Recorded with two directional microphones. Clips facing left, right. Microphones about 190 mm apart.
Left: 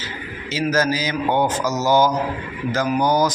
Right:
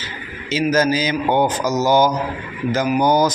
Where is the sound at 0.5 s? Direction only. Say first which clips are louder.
Right 3 dB; 20° right (ahead or behind).